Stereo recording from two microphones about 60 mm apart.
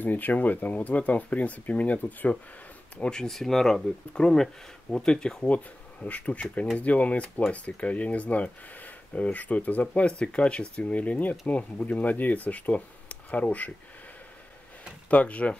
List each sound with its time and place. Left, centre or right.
0.0 s speech: left
3.0 s speech: centre
5.5 s speech: left
15.0 s speech: left